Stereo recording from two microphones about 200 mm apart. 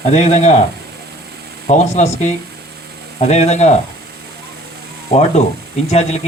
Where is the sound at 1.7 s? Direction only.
35° left (ahead or behind).